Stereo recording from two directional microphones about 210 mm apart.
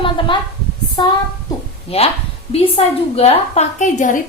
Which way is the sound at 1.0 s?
20° left (ahead or behind).